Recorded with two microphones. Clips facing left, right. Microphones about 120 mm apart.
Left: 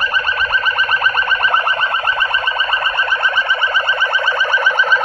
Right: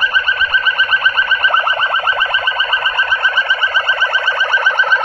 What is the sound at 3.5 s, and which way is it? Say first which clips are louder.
Alarm: even; 55° left (ahead or behind).